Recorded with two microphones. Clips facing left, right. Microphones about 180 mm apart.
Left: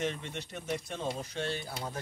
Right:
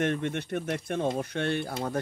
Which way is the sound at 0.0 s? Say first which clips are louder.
Right 7 dB; 60° right (ahead or behind).